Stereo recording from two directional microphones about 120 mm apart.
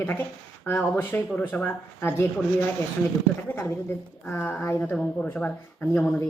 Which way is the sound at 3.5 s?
15° left (ahead or behind).